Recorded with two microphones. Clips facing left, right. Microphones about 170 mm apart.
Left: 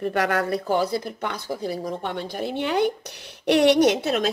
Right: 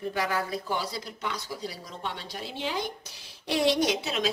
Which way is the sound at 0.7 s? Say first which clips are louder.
Left 9 dB; 55° left (ahead or behind).